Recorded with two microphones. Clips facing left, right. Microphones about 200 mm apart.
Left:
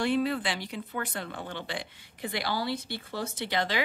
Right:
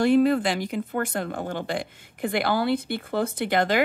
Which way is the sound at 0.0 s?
45° right (ahead or behind).